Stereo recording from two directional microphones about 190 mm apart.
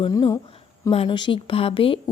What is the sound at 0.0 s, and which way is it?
Speech, 20° left (ahead or behind).